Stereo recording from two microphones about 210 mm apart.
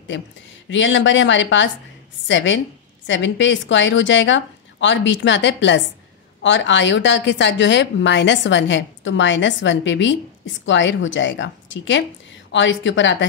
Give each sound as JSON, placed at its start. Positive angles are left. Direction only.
{"t": 0.7, "sound": "a woman's voice", "side_deg": 60}